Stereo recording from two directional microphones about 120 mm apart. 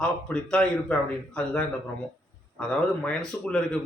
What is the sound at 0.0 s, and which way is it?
A man's voice, 5° left (ahead or behind).